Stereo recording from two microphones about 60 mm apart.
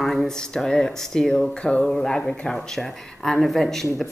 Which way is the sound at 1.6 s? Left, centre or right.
Centre.